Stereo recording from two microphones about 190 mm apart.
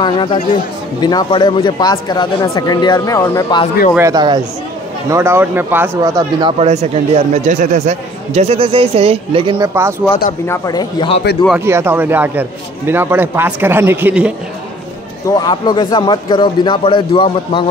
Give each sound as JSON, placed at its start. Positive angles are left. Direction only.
{"t": 0.0, "sound": "a man's voice", "side_deg": 25}
{"t": 3.9, "sound": "a man's voice", "side_deg": -20}
{"t": 6.6, "sound": "speech", "side_deg": -35}
{"t": 10.4, "sound": "a man's voice", "side_deg": 15}
{"t": 11.4, "sound": "a man's voice", "side_deg": -10}
{"t": 15.2, "sound": "a man's voice", "side_deg": 20}